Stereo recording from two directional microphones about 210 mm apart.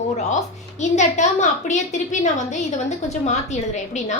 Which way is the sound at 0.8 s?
35° left (ahead or behind).